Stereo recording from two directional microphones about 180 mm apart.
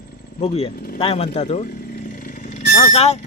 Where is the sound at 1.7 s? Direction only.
55° left (ahead or behind); by 3.2 s 35° left (ahead or behind).